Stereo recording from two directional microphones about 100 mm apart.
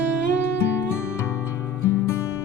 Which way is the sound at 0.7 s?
25° left (ahead or behind).